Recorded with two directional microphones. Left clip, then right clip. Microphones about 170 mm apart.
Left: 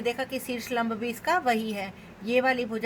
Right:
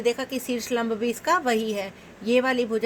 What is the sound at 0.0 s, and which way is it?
A woman's voice, 55° right (ahead or behind).